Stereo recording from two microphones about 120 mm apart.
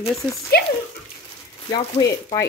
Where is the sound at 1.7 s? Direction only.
35° left (ahead or behind).